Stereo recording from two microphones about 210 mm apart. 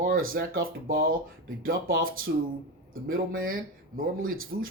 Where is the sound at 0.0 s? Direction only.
45° right (ahead or behind).